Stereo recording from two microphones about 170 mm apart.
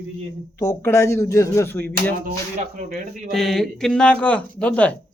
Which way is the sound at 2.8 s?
50° right (ahead or behind).